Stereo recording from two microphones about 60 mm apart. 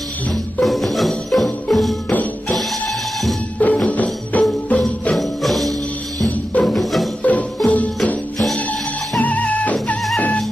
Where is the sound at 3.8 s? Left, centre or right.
Left.